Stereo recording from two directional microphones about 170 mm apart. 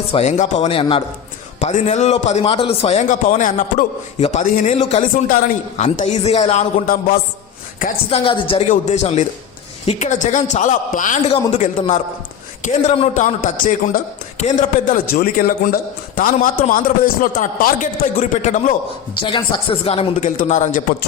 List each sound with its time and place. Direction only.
0.1 s a man's voice: 40° left (ahead or behind)
0.7 s a man's voice: 30° left (ahead or behind)
5.3 s a man's voice: 50° left (ahead or behind)
8.1 s a man's voice: 30° left (ahead or behind)
8.7 s a man's voice: 40° left (ahead or behind)
10.1 s a man's voice: 45° left (ahead or behind)
19.2 s a man's voice: 30° left (ahead or behind); by 20.8 s 50° left (ahead or behind)